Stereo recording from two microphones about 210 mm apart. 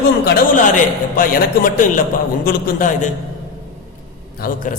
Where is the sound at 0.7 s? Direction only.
40° left (ahead or behind).